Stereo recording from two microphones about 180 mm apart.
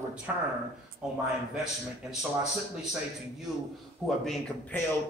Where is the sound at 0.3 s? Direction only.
10° right (ahead or behind).